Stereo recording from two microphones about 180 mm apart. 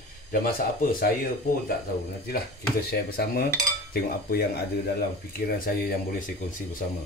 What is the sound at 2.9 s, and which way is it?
Speech, 55° left (ahead or behind).